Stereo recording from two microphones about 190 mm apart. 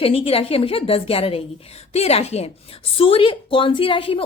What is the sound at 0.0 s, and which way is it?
A woman's voice, 30° left (ahead or behind).